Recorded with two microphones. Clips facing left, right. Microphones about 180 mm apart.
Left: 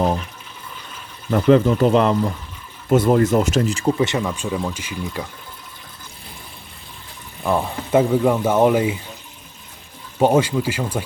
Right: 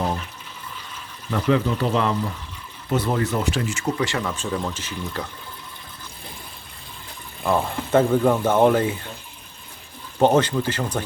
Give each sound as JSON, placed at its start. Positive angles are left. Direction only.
{"t": 1.3, "sound": "speech", "side_deg": 45}
{"t": 3.9, "sound": "speech", "side_deg": 20}
{"t": 7.4, "sound": "speech", "side_deg": 0}
{"t": 10.2, "sound": "speech", "side_deg": 10}